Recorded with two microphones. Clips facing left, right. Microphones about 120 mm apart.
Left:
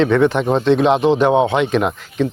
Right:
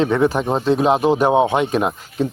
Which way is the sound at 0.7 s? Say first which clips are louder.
Left 2 dB; 40° right (ahead or behind).